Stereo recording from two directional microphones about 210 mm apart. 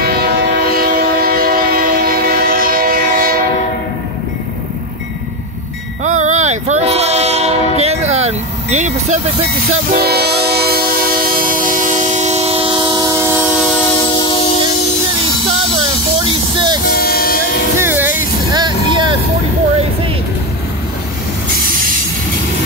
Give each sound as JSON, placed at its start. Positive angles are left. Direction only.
{"t": 0.0, "sound": "train", "side_deg": -45}
{"t": 6.0, "sound": "train", "side_deg": -35}
{"t": 14.0, "sound": "music", "side_deg": 20}
{"t": 16.3, "sound": "music", "side_deg": -20}
{"t": 16.8, "sound": "vehicle", "side_deg": 45}
{"t": 17.7, "sound": "music", "side_deg": -10}
{"t": 18.5, "sound": "vehicle", "side_deg": -20}